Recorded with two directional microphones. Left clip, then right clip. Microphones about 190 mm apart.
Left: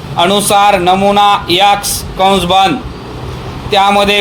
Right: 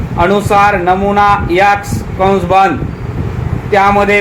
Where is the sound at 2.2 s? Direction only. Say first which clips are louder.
Even; 50° left (ahead or behind).